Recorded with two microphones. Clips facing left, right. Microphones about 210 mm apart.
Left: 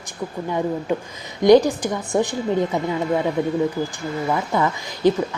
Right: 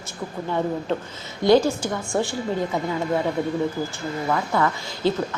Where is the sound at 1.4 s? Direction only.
15° left (ahead or behind).